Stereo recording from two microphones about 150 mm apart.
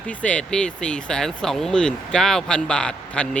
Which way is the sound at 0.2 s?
5° left (ahead or behind).